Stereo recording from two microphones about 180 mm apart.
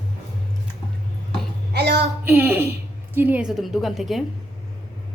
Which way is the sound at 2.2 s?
10° right (ahead or behind).